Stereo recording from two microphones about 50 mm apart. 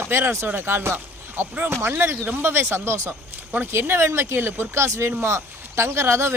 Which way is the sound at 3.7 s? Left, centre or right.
Right.